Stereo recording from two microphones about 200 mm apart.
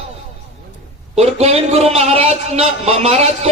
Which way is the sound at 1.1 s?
30° right (ahead or behind).